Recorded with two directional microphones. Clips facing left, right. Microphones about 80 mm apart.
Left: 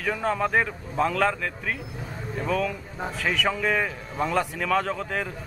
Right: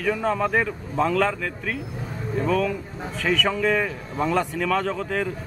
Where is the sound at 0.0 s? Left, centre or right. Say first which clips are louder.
Right 2 dB; centre.